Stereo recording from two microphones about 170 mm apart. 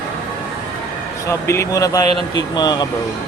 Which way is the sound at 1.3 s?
15° left (ahead or behind).